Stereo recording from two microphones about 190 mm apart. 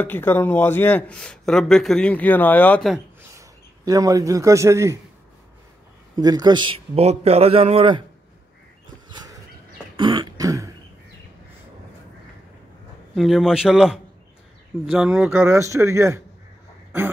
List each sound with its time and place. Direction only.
0.0 s a man's voice: 10° left (ahead or behind)
3.3 s a man's voice: 20° right (ahead or behind)
6.1 s a man's voice: 20° right (ahead or behind)
9.9 s throat clearing: 25° right (ahead or behind)
13.1 s a man's voice: centre (ahead or behind)